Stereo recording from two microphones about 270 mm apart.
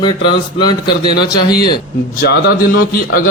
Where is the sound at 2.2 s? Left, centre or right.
Left.